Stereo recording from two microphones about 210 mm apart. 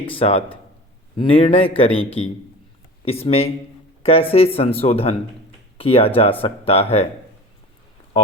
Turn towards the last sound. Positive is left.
turn(degrees=30)  # may be behind; listen again after turning